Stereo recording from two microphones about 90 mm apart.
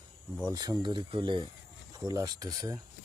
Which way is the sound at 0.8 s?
65° right (ahead or behind).